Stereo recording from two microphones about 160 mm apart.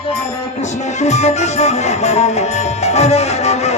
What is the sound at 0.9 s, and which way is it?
Music, 45° left (ahead or behind).